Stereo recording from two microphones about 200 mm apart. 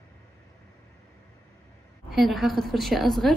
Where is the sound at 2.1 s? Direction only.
Centre (ahead or behind).